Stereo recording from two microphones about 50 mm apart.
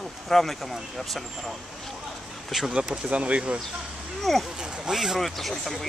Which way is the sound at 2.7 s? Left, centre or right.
Centre.